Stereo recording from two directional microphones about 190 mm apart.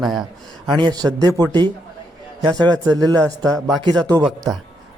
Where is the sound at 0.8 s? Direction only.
25° right (ahead or behind).